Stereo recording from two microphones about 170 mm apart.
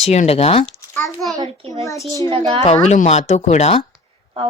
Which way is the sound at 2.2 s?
30° right (ahead or behind).